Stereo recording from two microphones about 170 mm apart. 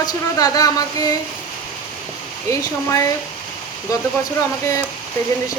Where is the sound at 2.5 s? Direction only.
20° left (ahead or behind).